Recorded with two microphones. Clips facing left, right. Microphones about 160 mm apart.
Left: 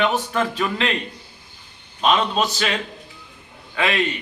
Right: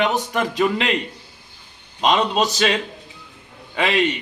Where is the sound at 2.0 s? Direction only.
20° right (ahead or behind).